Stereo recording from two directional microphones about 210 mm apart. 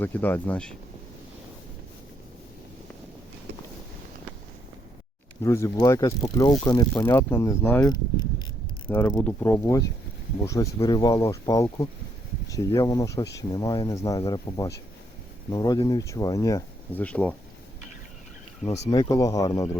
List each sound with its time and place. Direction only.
0.0 s speech: 10° left (ahead or behind)
5.4 s speech: 15° left (ahead or behind)
8.9 s speech: 10° left (ahead or behind)
18.9 s speech: 15° left (ahead or behind)